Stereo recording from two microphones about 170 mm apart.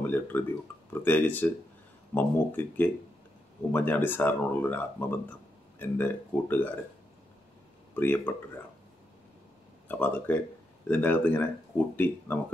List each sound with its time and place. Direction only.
0.0 s speech: 10° left (ahead or behind)
7.9 s speech: 10° left (ahead or behind)
9.8 s speech: 10° left (ahead or behind)